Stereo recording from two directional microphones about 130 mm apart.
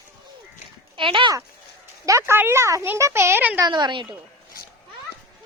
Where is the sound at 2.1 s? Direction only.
20° right (ahead or behind).